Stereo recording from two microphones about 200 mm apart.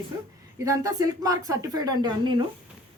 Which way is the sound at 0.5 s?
15° right (ahead or behind).